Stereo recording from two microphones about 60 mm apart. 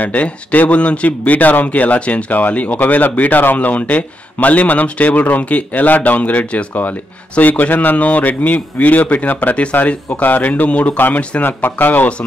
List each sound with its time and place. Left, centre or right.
0.0 s speech: left